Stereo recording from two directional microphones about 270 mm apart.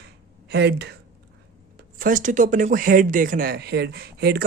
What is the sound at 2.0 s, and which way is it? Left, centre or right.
Speech, right.